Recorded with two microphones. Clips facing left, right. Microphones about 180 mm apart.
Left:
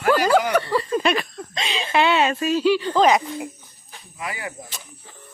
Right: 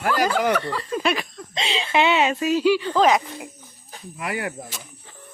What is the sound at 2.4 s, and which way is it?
Speech, 10° right (ahead or behind).